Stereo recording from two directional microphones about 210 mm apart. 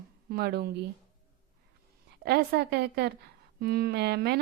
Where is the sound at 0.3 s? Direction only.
50° right (ahead or behind).